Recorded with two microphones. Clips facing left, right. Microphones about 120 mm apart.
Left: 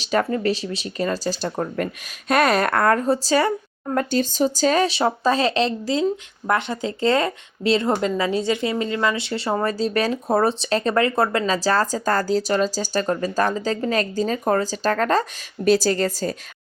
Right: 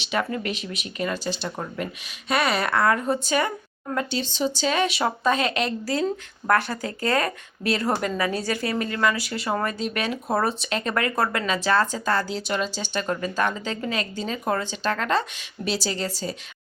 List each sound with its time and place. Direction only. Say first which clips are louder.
0.0 s speech: left 6 dB; 40° left (ahead or behind)
3.1 s speech: left 5 dB; 35° left (ahead or behind)
3.9 s speech: left 6 dB; 45° left (ahead or behind)